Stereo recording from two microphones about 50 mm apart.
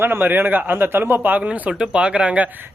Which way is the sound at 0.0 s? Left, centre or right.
Right.